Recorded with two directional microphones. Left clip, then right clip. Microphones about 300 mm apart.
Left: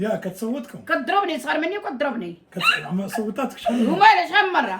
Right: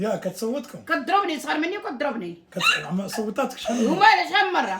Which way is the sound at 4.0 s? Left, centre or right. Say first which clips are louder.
Left 3 dB; centre.